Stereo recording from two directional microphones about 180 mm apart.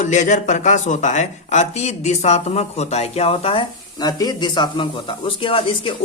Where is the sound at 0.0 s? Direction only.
45° left (ahead or behind).